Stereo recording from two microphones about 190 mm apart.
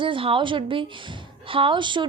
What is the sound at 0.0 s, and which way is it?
A woman's voice, 25° right (ahead or behind).